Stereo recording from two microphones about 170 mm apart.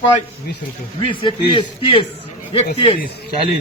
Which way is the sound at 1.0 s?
30° left (ahead or behind).